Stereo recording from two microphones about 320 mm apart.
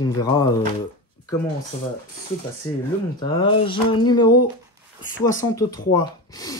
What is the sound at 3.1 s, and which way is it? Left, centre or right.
Speech, centre.